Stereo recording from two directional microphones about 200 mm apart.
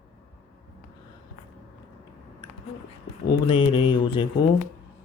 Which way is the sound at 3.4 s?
25° left (ahead or behind).